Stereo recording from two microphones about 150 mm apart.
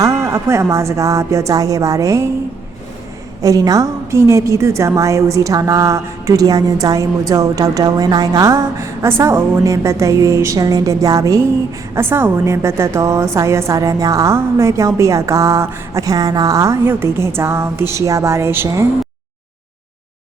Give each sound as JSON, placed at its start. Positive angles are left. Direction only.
{"t": 0.0, "sound": "a woman's voice", "side_deg": -20}
{"t": 3.4, "sound": "a woman's voice", "side_deg": -25}